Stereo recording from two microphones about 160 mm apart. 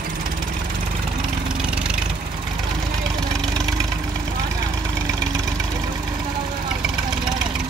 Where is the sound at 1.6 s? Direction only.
5° right (ahead or behind).